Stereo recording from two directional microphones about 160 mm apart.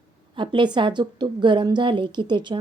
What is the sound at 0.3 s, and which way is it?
A woman's voice, 30° right (ahead or behind).